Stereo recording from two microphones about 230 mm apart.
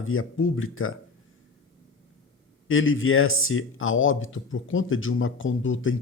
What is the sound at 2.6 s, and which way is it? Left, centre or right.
Speech, left.